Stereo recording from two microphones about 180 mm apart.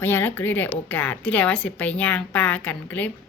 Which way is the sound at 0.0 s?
10° left (ahead or behind).